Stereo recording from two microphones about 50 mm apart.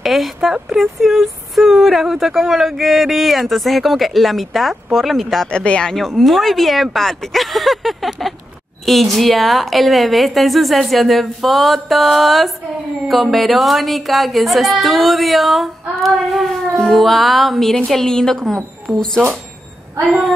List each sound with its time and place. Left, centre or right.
0.0 s speech: centre
5.5 s speech: centre
5.9 s speech: centre